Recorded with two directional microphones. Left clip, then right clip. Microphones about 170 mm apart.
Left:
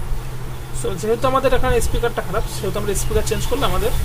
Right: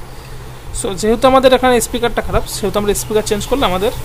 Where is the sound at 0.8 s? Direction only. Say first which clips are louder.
Right 7 dB; 45° right (ahead or behind).